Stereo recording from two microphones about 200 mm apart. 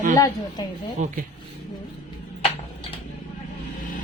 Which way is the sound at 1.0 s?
35° right (ahead or behind).